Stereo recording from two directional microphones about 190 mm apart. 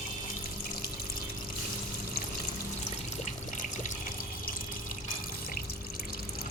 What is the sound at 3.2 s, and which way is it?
Water, 40° left (ahead or behind).